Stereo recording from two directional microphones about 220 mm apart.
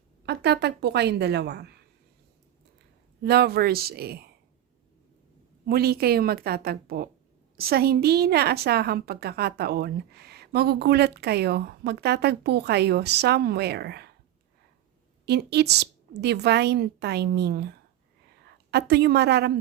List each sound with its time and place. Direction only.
0.3 s a woman's voice: 50° right (ahead or behind)
3.2 s a woman's voice: 45° right (ahead or behind)
5.6 s a woman's voice: 45° right (ahead or behind)
15.3 s a woman's voice: 50° right (ahead or behind)